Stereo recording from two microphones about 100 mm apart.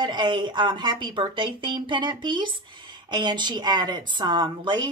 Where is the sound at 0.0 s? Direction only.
50° right (ahead or behind).